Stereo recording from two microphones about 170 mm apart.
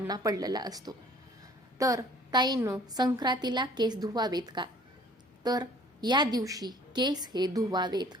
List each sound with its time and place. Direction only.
0.1 s a woman's voice: 20° right (ahead or behind)